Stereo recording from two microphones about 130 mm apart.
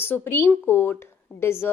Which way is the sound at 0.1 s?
15° left (ahead or behind).